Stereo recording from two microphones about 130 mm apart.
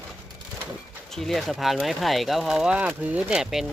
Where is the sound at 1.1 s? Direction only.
Centre (ahead or behind).